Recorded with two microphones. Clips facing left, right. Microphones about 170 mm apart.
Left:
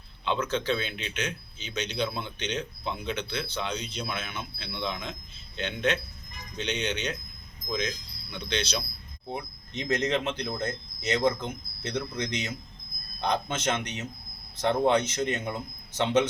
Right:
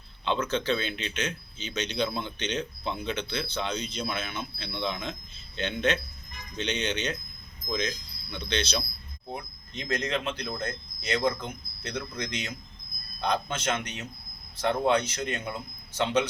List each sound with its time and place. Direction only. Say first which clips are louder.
0.3 s speech: right 1 dB; 10° left (ahead or behind)